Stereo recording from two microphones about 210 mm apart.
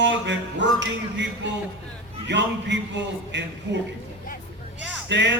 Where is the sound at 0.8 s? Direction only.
55° right (ahead or behind).